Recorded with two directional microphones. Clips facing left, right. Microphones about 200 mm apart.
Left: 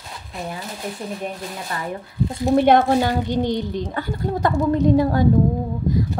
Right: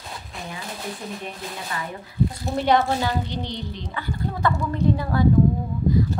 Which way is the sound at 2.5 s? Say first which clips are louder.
Left 7 dB; 55° left (ahead or behind).